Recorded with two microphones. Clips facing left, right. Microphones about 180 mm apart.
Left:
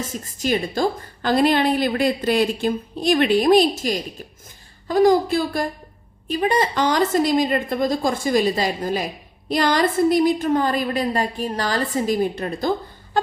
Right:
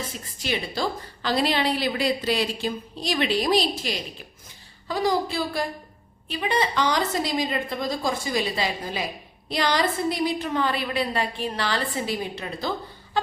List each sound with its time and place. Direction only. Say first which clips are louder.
0.0 s a woman's voice: left 7 dB; 45° left (ahead or behind)